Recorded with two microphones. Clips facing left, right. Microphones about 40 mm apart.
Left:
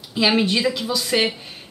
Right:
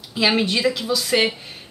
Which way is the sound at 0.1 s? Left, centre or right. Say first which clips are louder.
Left 1 dB; centre.